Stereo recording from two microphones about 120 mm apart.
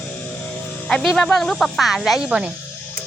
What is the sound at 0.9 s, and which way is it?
Speech, 5° left (ahead or behind).